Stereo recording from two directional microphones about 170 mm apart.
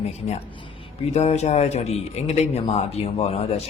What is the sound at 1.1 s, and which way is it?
Speech, 40° left (ahead or behind).